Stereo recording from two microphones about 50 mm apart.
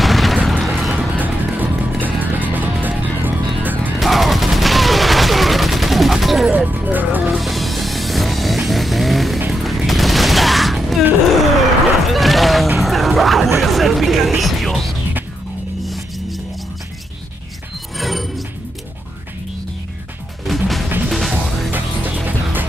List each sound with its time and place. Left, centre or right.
0.0 s music: centre
1.1 s music: right
4.0 s fusillade: centre
6.7 s music: right
7.3 s music: centre
9.5 s fusillade: centre
11.2 s a sound: centre
12.7 s music: centre
17.9 s music: centre
20.4 s music: centre
21.7 s music: right